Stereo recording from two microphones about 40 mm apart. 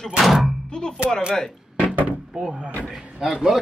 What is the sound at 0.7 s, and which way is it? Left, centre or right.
Music, centre.